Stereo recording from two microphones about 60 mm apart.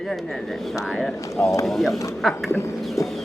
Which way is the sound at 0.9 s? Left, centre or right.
Centre.